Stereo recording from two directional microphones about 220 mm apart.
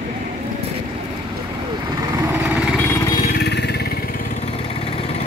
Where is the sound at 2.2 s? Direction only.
10° right (ahead or behind).